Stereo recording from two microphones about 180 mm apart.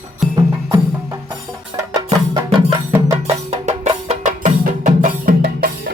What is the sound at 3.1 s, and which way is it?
Music, 35° right (ahead or behind).